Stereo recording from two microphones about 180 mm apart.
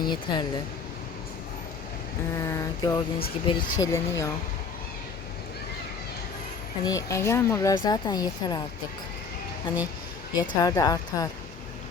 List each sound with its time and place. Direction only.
0.1 s speech: 25° left (ahead or behind)
2.4 s speech: 20° left (ahead or behind)
6.8 s speech: 15° left (ahead or behind)
9.7 s speech: 25° left (ahead or behind)